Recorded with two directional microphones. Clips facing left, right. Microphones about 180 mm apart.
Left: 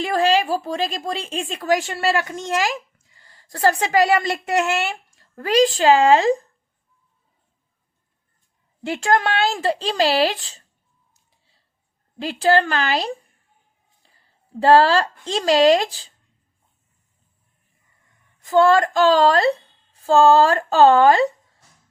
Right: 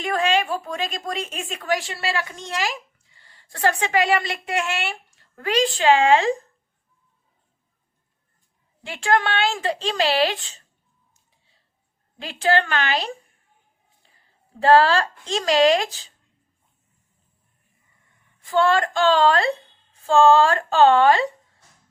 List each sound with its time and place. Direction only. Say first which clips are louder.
0.0 s a woman's voice: left 3 dB; 35° left (ahead or behind)
8.9 s a woman's voice: left 2 dB; 40° left (ahead or behind)
12.2 s a woman's voice: left 4 dB; 35° left (ahead or behind)
14.6 s a woman's voice: left 2 dB; 30° left (ahead or behind)
18.4 s a woman's voice: left 4 dB; 40° left (ahead or behind)